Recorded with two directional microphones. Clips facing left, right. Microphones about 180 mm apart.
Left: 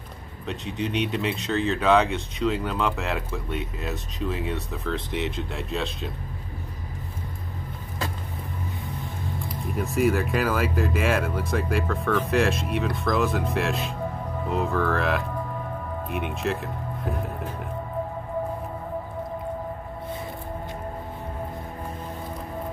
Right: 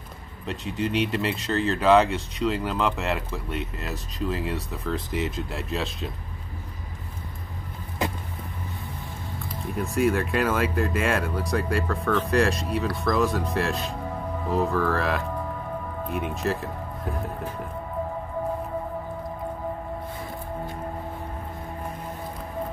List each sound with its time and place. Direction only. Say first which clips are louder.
0.5 s speech: right 1 dB; centre (ahead or behind)
8.0 s music: right 4 dB; 20° right (ahead or behind)
9.8 s speech: even; centre (ahead or behind)